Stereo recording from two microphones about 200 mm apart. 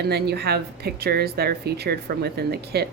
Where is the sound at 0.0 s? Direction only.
55° right (ahead or behind).